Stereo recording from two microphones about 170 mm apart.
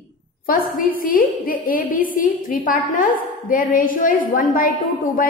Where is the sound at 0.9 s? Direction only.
55° left (ahead or behind).